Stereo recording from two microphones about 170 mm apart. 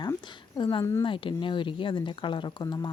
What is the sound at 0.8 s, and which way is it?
Speech, 15° left (ahead or behind).